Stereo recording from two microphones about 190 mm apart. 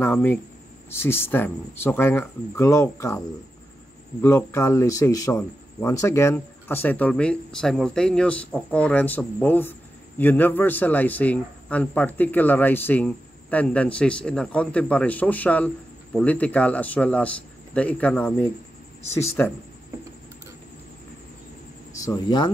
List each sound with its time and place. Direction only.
0.0 s speech: 10° left (ahead or behind)
4.2 s speech: 10° left (ahead or behind)
21.9 s speech: 15° left (ahead or behind)